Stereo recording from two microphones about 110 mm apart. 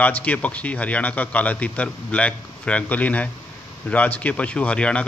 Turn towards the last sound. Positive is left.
turn(degrees=10)  # may be behind; listen again after turning